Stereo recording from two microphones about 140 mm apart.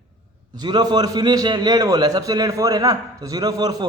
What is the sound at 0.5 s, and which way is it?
A man's voice, 30° right (ahead or behind).